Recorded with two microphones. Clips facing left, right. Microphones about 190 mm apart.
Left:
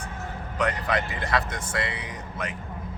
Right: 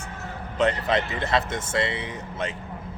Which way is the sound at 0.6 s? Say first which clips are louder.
Right 4 dB; 25° right (ahead or behind).